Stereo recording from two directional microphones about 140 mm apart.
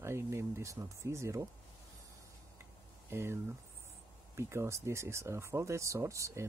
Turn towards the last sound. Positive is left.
turn(degrees=-20)  # may be behind; listen again after turning